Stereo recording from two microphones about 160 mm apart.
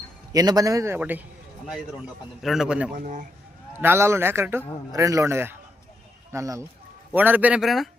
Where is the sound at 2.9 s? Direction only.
55° right (ahead or behind).